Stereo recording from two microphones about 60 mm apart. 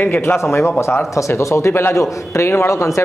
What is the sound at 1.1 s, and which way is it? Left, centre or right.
Speech, left.